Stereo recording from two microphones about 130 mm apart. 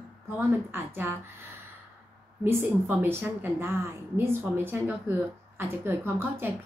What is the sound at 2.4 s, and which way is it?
A woman's voice, 15° right (ahead or behind).